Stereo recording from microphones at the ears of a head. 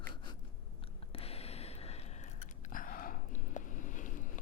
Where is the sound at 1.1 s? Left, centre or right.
Left.